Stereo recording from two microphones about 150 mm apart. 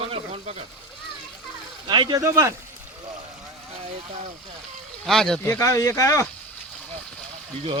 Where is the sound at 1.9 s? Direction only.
30° right (ahead or behind).